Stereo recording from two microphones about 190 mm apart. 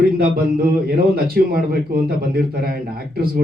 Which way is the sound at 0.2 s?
55° right (ahead or behind).